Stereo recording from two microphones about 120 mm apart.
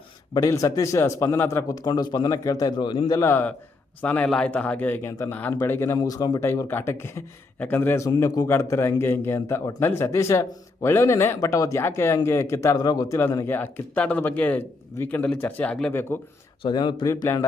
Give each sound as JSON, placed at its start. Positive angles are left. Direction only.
{"t": 0.3, "sound": "speech", "side_deg": 30}
{"t": 3.1, "sound": "a man's voice", "side_deg": 20}
{"t": 6.0, "sound": "a man's voice", "side_deg": 30}
{"t": 16.6, "sound": "speech", "side_deg": 40}